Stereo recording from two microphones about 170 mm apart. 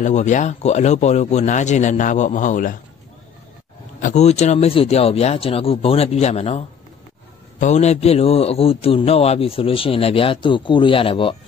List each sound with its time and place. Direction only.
0.0 s a man's voice: 45° left (ahead or behind)
4.0 s a man's voice: 40° left (ahead or behind)